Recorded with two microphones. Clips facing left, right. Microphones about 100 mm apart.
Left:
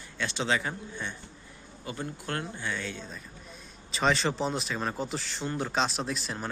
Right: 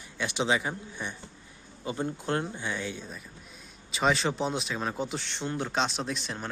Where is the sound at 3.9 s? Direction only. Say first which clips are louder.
Even; centre (ahead or behind).